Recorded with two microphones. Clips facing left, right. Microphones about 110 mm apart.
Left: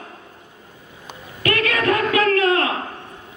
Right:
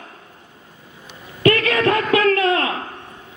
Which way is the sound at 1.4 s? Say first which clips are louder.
Right 3 dB; 30° right (ahead or behind).